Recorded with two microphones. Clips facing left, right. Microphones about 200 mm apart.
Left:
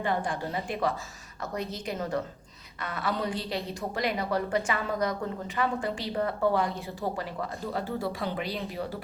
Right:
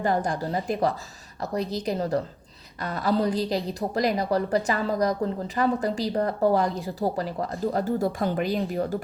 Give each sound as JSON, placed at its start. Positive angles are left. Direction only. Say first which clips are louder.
{"t": 0.0, "sound": "speech", "louder": "right 5 dB", "side_deg": -40}